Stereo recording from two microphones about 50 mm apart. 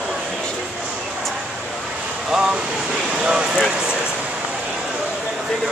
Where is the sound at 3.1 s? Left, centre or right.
Centre.